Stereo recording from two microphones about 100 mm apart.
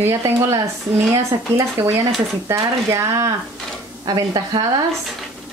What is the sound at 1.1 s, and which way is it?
Speech, 30° right (ahead or behind).